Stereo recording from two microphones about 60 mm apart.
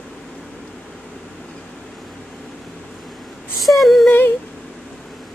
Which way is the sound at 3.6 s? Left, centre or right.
Centre.